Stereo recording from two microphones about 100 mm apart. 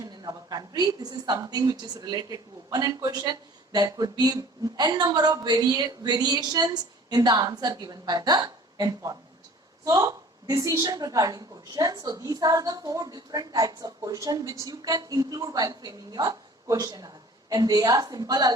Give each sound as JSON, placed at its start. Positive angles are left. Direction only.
{"t": 0.0, "sound": "a woman's voice", "side_deg": -40}